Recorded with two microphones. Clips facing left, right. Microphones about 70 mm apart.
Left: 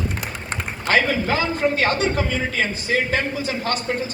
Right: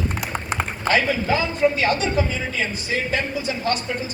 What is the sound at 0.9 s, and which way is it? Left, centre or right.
Speech, left.